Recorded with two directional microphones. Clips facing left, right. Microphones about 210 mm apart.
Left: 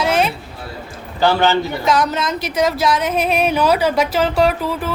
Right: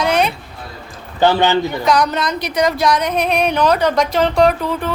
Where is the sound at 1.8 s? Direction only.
Centre (ahead or behind).